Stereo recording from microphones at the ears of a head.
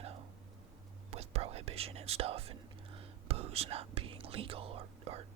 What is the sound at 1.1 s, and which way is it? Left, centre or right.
Speech, right.